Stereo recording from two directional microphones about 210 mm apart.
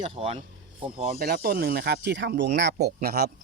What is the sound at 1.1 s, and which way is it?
Speech, 45° right (ahead or behind).